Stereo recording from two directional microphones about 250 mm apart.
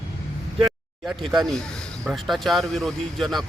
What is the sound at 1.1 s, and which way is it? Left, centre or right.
Speech, centre.